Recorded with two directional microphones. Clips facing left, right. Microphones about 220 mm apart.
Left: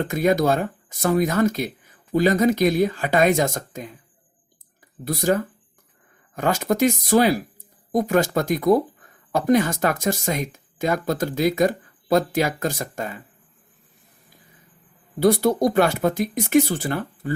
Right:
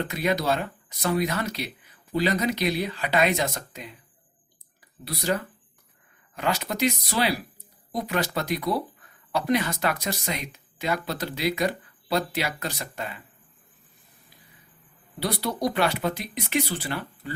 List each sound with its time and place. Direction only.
0.0 s speech: 45° left (ahead or behind)
5.0 s speech: 45° left (ahead or behind)
15.2 s speech: 50° left (ahead or behind)